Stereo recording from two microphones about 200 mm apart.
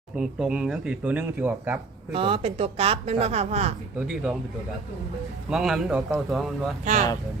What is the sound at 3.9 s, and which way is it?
Speech, 5° right (ahead or behind).